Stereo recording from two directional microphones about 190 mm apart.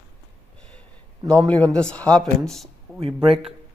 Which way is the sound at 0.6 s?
5° left (ahead or behind).